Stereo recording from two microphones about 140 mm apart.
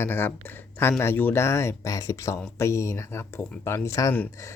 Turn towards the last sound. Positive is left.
turn(degrees=15)  # may be behind; listen again after turning